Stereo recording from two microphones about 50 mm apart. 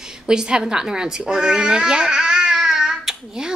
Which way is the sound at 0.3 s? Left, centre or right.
Centre.